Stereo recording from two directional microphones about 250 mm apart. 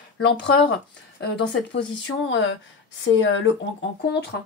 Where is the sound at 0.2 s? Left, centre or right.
Left.